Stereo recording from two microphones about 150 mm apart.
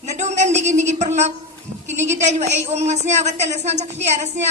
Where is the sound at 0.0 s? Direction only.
50° right (ahead or behind).